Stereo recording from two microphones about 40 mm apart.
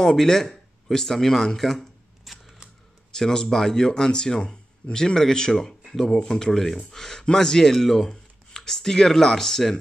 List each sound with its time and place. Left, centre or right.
0.0 s speech: centre